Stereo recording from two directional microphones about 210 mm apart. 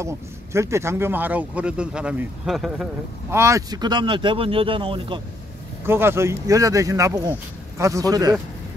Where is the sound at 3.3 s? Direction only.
15° right (ahead or behind).